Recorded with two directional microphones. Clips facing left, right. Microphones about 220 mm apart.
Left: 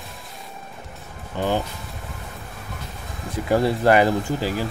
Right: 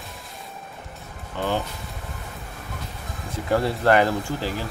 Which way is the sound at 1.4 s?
15° left (ahead or behind).